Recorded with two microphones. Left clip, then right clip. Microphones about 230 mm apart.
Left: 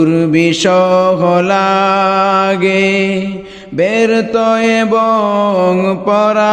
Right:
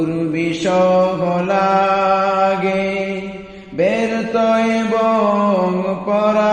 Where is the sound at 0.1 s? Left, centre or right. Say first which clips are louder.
Left 8 dB; left.